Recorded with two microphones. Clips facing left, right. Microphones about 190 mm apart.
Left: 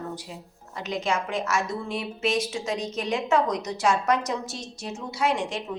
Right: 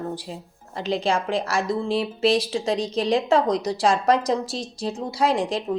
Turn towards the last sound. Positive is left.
turn(degrees=-35)  # may be behind; listen again after turning